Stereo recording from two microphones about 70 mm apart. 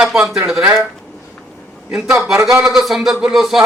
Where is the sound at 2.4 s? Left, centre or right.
Right.